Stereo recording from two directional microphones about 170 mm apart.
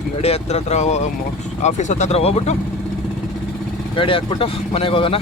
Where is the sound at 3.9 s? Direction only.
30° left (ahead or behind).